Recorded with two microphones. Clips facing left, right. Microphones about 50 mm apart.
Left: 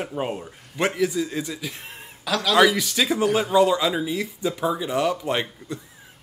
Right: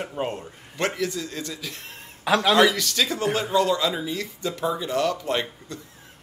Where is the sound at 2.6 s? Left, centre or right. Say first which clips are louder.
Left 1 dB; centre.